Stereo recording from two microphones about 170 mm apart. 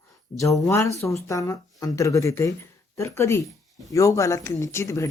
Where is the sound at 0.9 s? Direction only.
15° left (ahead or behind).